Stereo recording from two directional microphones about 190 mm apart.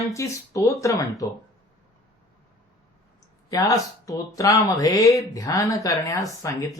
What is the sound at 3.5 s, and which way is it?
Speech, 20° left (ahead or behind).